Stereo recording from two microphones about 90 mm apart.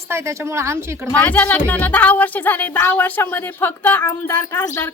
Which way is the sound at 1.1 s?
20° left (ahead or behind).